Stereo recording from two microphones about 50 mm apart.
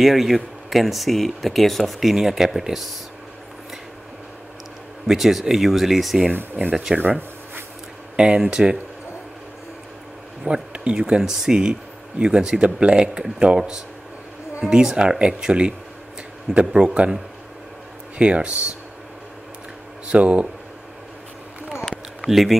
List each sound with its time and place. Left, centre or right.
0.0 s speech: centre
5.0 s speech: centre
6.3 s speech: right
6.7 s speech: centre
7.0 s rub: right
8.2 s speech: centre
10.4 s speech: centre
20.1 s speech: right
22.2 s speech: centre